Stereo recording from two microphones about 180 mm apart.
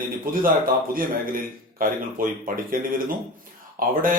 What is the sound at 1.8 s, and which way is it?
Speech, 50° right (ahead or behind).